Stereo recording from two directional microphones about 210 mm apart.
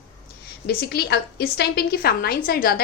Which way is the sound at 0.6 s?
50° left (ahead or behind).